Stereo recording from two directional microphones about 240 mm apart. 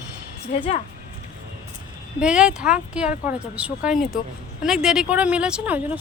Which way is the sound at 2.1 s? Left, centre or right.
Centre.